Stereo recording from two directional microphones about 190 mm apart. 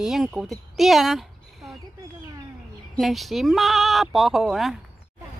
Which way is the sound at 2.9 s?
Centre (ahead or behind).